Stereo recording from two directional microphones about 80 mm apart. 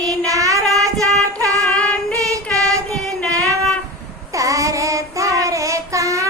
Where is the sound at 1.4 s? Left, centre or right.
Right.